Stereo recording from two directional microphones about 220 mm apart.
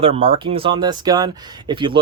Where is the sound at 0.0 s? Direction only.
25° right (ahead or behind).